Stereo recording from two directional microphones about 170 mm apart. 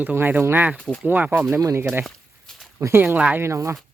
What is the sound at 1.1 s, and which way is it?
Speech, 10° right (ahead or behind).